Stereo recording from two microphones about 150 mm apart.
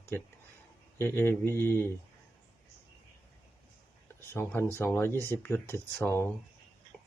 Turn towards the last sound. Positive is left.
turn(degrees=15)  # may be behind; listen again after turning